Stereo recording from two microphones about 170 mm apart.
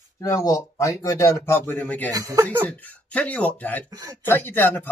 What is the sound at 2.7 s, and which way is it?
Speech, 10° left (ahead or behind).